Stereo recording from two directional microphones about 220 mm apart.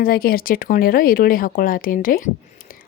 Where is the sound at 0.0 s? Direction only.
40° left (ahead or behind).